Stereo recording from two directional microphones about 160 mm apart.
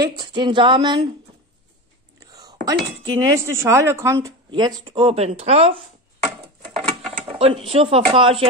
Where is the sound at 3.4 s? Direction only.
15° right (ahead or behind).